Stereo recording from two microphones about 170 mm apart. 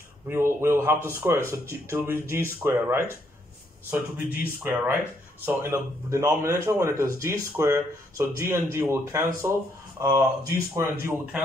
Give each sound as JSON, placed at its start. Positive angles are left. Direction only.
{"t": 0.3, "sound": "speech", "side_deg": -15}